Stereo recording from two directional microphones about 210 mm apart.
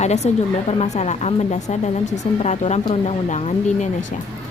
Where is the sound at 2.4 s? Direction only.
35° left (ahead or behind).